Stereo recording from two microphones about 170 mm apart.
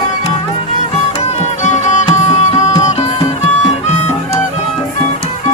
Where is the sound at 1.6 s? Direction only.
45° left (ahead or behind).